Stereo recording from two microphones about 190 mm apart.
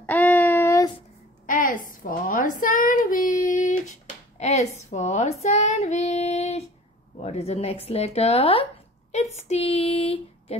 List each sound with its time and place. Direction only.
0.0 s child singing: 10° left (ahead or behind)
1.4 s a sound: 45° left (ahead or behind)
5.4 s child singing: 35° left (ahead or behind)
7.2 s speech: 35° left (ahead or behind)
9.4 s female singing: 35° left (ahead or behind)